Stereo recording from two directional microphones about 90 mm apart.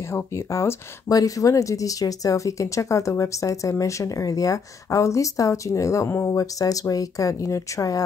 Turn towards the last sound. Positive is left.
turn(degrees=35)  # may be behind; listen again after turning